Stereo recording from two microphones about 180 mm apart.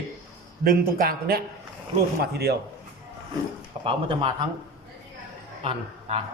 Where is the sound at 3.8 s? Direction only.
30° right (ahead or behind).